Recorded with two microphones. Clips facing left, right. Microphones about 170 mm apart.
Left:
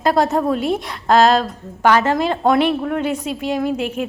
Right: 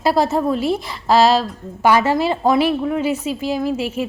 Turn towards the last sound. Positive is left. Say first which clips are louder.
# even
turn(degrees=0)  # may be behind; listen again after turning